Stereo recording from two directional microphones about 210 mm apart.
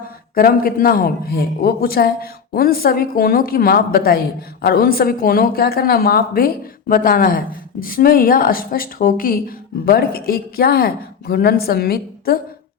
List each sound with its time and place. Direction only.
0.3 s a man's voice: 45° left (ahead or behind)